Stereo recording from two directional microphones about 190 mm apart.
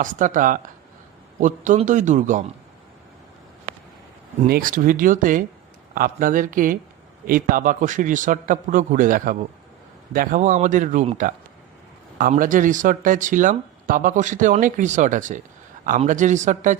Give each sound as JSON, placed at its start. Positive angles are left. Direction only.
{"t": 0.0, "sound": "a man's voice", "side_deg": -45}
{"t": 4.4, "sound": "a man's voice", "side_deg": -50}